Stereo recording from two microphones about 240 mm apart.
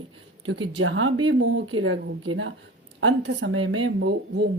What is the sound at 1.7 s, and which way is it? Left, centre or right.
Speech, right.